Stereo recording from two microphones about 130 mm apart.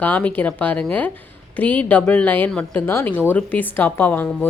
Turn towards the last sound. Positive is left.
turn(degrees=15)  # may be behind; listen again after turning